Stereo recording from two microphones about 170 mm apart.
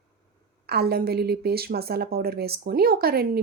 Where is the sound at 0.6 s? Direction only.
70° right (ahead or behind).